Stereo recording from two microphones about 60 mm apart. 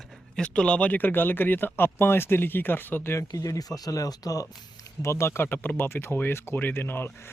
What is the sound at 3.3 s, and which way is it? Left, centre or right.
Speech, left.